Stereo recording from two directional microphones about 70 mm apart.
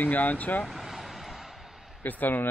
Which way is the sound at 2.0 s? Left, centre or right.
Left.